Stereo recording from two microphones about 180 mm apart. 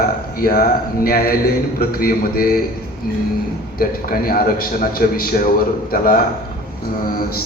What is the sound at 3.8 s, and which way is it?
A man's voice, 55° left (ahead or behind).